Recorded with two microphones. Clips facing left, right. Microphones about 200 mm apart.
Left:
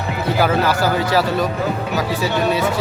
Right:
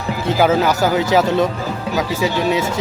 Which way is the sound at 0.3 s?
20° right (ahead or behind).